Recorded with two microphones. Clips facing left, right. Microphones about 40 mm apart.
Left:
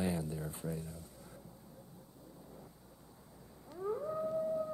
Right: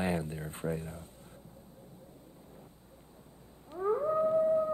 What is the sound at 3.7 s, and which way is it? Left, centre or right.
Howl, right.